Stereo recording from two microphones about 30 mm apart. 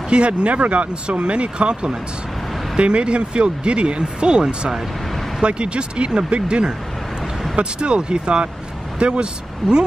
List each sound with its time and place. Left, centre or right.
0.1 s speech: right